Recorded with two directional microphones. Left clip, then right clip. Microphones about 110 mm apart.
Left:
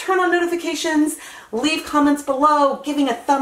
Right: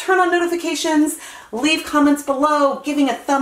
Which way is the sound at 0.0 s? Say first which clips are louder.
Right 2 dB; 5° right (ahead or behind).